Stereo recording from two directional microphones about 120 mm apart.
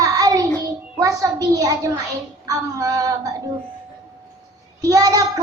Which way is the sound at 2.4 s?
30° right (ahead or behind).